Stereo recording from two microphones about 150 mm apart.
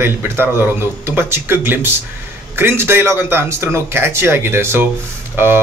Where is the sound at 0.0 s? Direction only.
15° right (ahead or behind).